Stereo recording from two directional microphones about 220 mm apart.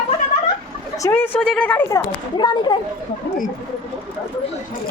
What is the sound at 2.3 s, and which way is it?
Speech, 20° left (ahead or behind).